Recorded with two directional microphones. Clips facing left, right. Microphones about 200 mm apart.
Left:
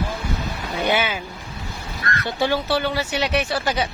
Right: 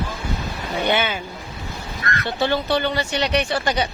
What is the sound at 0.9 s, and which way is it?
Speech, 10° left (ahead or behind).